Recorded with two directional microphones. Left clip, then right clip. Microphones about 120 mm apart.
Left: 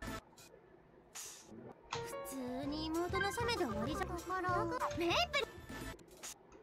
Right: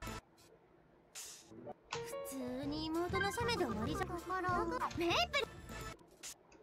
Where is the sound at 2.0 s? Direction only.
Centre (ahead or behind).